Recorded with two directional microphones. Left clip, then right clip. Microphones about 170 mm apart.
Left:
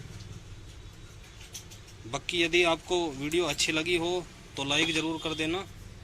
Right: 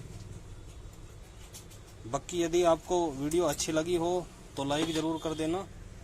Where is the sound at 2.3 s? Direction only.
20° right (ahead or behind).